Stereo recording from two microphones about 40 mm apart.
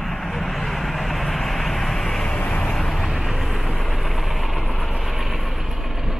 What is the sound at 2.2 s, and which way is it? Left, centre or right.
Vehicle, left.